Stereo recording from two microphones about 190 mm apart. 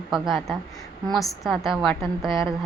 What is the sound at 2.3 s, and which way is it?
Speech, 25° right (ahead or behind).